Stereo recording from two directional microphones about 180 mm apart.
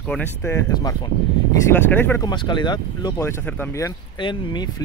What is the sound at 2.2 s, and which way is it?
Speech, 25° left (ahead or behind).